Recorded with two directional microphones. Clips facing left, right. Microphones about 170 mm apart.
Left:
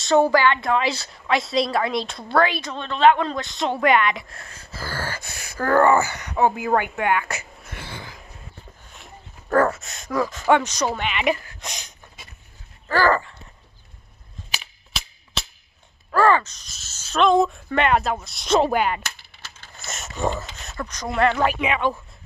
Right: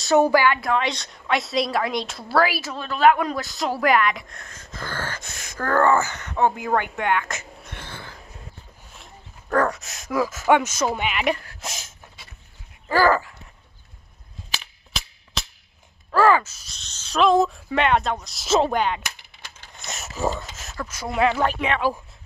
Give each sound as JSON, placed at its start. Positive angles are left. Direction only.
{"t": 0.0, "sound": "a woman's voice", "side_deg": -10}
{"t": 12.8, "sound": "dog", "side_deg": -10}
{"t": 16.1, "sound": "speech", "side_deg": -5}
{"t": 16.7, "sound": "a woman's voice", "side_deg": 5}
{"t": 19.0, "sound": "a sound", "side_deg": -15}
{"t": 19.8, "sound": "speech", "side_deg": 0}
{"t": 21.5, "sound": "speech", "side_deg": 5}